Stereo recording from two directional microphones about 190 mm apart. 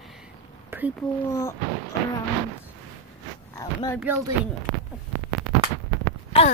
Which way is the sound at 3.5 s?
20° left (ahead or behind).